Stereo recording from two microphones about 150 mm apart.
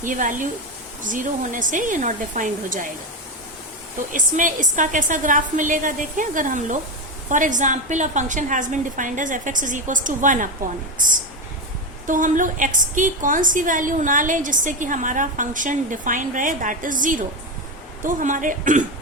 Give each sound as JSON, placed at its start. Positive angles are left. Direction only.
{"t": 0.0, "sound": "a woman's voice", "side_deg": -60}
{"t": 4.1, "sound": "a woman's voice", "side_deg": -60}